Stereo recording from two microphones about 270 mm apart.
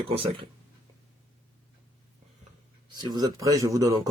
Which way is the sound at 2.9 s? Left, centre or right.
Centre.